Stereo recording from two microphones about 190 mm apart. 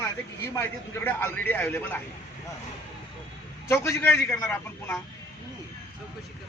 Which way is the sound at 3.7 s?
15° left (ahead or behind).